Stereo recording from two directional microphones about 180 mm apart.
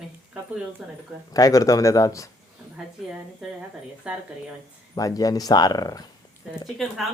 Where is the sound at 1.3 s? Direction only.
20° left (ahead or behind).